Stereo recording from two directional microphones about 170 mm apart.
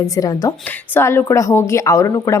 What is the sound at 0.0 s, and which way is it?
A woman's voice, 20° left (ahead or behind).